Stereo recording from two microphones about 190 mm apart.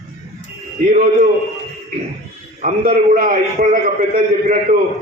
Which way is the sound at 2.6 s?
45° right (ahead or behind).